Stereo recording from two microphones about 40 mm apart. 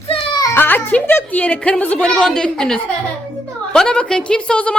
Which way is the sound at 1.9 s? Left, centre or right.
Centre.